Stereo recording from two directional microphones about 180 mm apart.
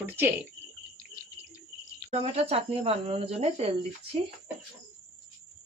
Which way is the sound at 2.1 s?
35° right (ahead or behind).